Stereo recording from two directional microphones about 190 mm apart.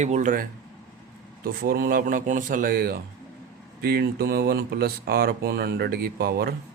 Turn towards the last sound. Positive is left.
turn(degrees=-55)  # may be behind; listen again after turning